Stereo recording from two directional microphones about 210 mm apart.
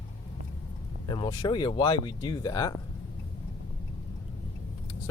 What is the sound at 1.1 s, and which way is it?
Speech, 20° left (ahead or behind).